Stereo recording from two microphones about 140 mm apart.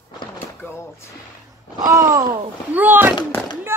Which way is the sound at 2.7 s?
15° right (ahead or behind).